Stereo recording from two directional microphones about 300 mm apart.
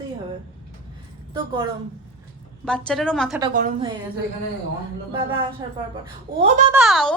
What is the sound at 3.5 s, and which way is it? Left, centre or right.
Speech, right.